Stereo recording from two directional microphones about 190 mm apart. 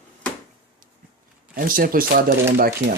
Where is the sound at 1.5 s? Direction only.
50° right (ahead or behind).